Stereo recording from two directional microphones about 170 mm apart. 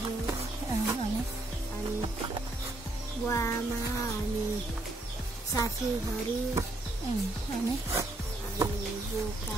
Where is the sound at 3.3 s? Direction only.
15° left (ahead or behind).